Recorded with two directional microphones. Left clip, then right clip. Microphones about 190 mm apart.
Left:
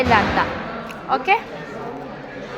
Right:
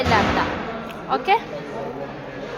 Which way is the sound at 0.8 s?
10° left (ahead or behind).